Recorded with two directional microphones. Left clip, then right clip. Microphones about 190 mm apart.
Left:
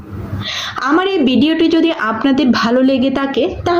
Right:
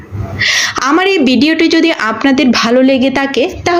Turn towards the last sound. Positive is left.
turn(degrees=-15)  # may be behind; listen again after turning